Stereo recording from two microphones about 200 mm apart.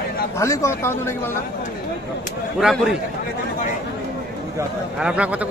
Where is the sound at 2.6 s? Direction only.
5° right (ahead or behind).